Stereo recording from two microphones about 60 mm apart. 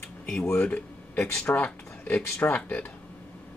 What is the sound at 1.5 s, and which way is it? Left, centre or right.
Speech, left.